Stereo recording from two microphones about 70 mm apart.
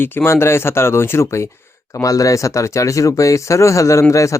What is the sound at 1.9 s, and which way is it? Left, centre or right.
Speech, left.